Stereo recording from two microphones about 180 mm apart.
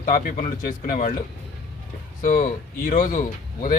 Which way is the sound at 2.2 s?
40° left (ahead or behind).